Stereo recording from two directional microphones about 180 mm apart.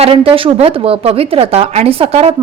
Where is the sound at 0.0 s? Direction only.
30° right (ahead or behind).